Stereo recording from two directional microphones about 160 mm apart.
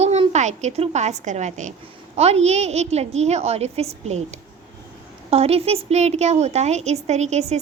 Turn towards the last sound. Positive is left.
turn(degrees=-45)  # may be behind; listen again after turning